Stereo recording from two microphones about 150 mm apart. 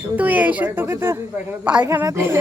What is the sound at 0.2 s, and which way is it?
Speech, 10° right (ahead or behind).